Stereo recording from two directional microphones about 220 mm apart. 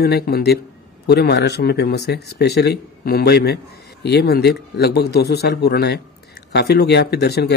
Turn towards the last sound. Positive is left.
turn(degrees=45)  # may be behind; listen again after turning